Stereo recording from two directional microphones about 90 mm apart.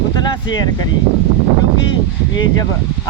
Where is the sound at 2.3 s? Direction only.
50° left (ahead or behind).